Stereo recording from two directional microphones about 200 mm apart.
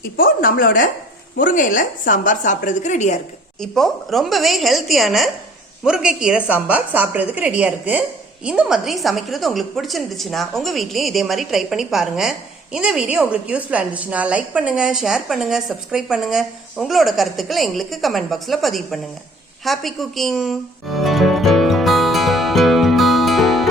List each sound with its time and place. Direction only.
0.2 s a woman's voice: 45° left (ahead or behind)
3.6 s a woman's voice: centre (ahead or behind)
19.6 s music: centre (ahead or behind)